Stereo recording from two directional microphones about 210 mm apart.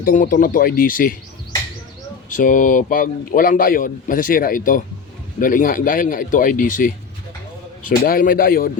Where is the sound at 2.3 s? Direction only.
40° left (ahead or behind).